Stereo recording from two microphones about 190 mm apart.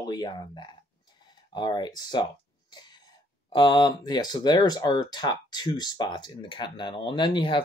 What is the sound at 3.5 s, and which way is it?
Speech, 25° left (ahead or behind).